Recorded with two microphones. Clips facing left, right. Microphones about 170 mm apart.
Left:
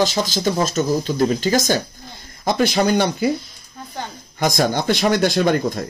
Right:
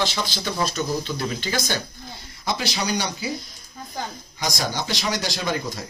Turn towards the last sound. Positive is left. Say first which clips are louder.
# left 9 dB
turn(degrees=55)  # may be behind; listen again after turning